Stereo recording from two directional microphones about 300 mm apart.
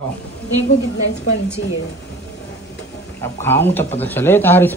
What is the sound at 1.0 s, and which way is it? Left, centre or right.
Speech, left.